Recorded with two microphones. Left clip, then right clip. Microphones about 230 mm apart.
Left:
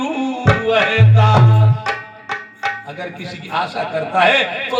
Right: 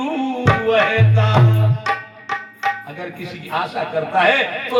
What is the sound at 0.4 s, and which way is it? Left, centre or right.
Music, left.